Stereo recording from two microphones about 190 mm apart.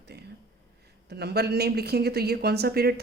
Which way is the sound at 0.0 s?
60° right (ahead or behind).